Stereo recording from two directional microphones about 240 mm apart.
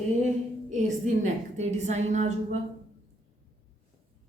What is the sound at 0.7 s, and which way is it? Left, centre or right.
A woman's voice, right.